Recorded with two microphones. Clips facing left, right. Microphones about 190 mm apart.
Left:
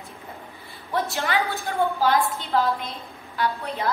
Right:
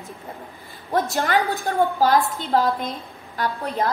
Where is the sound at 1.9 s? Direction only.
40° right (ahead or behind).